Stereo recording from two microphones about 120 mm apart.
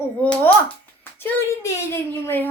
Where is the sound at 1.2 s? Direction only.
20° left (ahead or behind).